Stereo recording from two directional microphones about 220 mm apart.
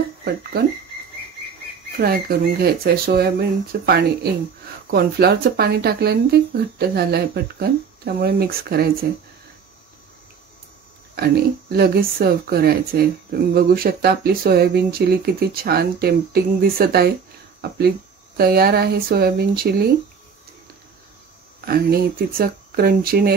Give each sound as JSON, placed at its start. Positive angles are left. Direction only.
{"t": 0.2, "sound": "speech", "side_deg": -45}
{"t": 2.0, "sound": "speech", "side_deg": -45}
{"t": 11.1, "sound": "speech", "side_deg": -45}
{"t": 21.6, "sound": "speech", "side_deg": -45}